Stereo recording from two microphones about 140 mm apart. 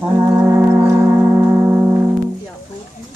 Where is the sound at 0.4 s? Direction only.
20° right (ahead or behind).